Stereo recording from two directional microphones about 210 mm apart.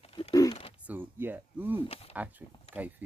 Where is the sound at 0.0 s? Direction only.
30° left (ahead or behind).